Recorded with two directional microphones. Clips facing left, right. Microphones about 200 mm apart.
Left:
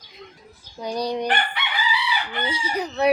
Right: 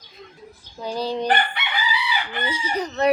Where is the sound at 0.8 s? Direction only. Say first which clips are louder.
Even; 15° left (ahead or behind).